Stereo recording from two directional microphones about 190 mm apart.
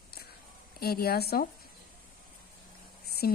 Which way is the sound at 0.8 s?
55° left (ahead or behind).